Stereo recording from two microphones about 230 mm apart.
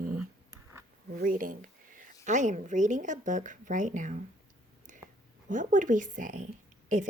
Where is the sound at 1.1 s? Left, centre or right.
Right.